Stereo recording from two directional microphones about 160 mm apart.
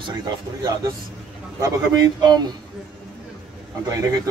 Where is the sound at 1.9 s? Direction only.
25° right (ahead or behind).